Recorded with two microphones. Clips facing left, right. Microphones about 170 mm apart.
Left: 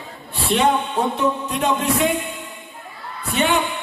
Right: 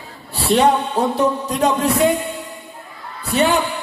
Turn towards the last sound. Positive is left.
turn(degrees=-35)  # may be behind; listen again after turning